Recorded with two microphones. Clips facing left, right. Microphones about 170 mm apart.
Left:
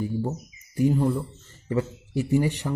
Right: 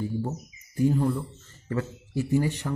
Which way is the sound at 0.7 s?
15° left (ahead or behind).